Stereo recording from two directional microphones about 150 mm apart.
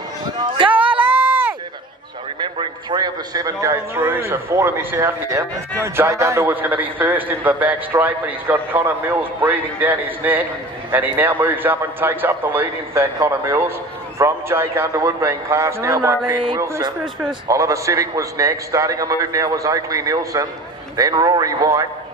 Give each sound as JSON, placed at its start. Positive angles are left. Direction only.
{"t": 0.6, "sound": "speech", "side_deg": -35}
{"t": 1.0, "sound": "a sound", "side_deg": -15}
{"t": 2.4, "sound": "a man's voice", "side_deg": -30}
{"t": 3.9, "sound": "a man's voice", "side_deg": -10}